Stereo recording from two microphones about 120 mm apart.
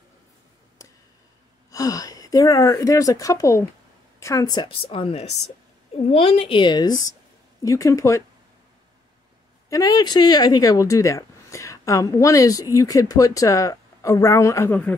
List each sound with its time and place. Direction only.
1.7 s a child's voice: 30° left (ahead or behind)
9.7 s speech: 30° left (ahead or behind)